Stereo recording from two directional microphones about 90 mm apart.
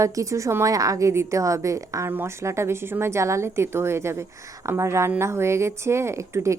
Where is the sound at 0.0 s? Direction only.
35° right (ahead or behind).